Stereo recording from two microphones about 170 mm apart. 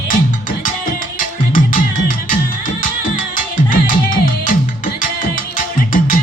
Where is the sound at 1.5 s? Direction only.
50° left (ahead or behind).